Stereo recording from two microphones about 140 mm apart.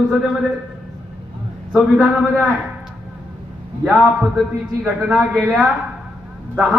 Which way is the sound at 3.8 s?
Centre (ahead or behind).